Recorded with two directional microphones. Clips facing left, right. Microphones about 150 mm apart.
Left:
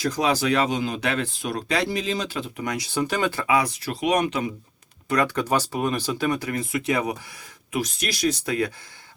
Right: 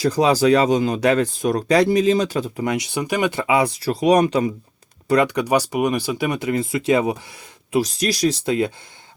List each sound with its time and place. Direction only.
0.0 s speech: 35° right (ahead or behind)
2.6 s speech: 20° right (ahead or behind); by 4.4 s 35° right (ahead or behind)
5.1 s speech: 15° right (ahead or behind)